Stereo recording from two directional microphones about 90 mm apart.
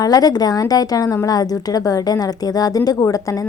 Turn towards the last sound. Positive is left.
turn(degrees=40)  # may be behind; listen again after turning